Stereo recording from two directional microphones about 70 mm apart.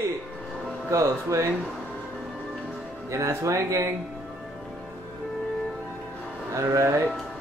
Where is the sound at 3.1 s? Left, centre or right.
Right.